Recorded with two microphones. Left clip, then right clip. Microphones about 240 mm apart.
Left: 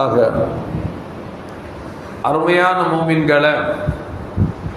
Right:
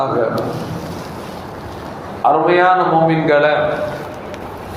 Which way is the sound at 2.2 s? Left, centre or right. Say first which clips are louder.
Right 2 dB; left.